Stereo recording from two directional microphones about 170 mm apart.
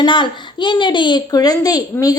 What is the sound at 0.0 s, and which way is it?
A woman's voice, 30° left (ahead or behind).